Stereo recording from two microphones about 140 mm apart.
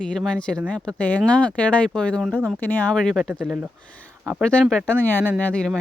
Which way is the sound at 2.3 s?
5° right (ahead or behind).